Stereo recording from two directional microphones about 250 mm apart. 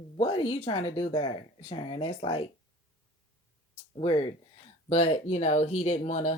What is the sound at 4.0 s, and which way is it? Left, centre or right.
Speech, left.